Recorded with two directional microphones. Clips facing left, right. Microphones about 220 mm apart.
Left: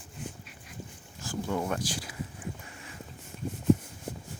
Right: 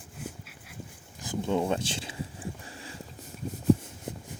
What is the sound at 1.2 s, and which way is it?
Speech, 20° right (ahead or behind).